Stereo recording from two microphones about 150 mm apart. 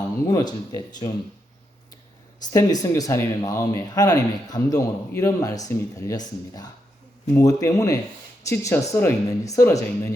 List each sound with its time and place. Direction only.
0.3 s speech: 25° left (ahead or behind)
2.4 s speech: 25° left (ahead or behind)